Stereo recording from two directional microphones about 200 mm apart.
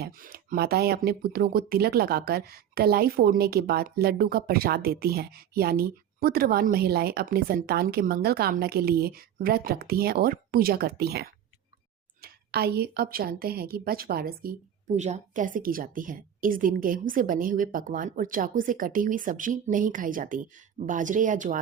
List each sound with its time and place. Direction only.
0.0 s speech: 45° right (ahead or behind)
14.9 s speech: 35° right (ahead or behind)